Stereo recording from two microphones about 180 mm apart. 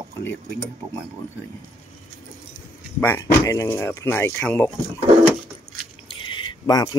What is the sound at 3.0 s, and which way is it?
Speech, 15° left (ahead or behind).